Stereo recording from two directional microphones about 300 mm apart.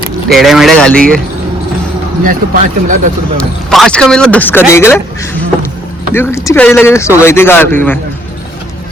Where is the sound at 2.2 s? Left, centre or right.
Right.